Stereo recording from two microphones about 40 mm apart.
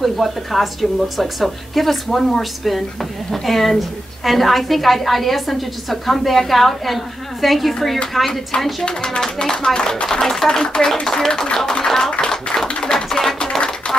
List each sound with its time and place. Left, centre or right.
0.0 s a woman's voice: centre
8.8 s speech: left
10.2 s speech: centre
13.4 s a sound: centre